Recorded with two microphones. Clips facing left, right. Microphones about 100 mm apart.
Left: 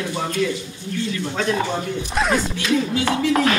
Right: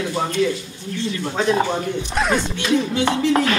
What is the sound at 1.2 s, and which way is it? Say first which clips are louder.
Speech: right 4 dB; 25° right (ahead or behind).